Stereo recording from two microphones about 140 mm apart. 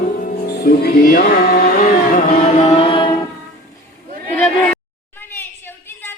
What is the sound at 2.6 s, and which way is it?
Music, 45° left (ahead or behind).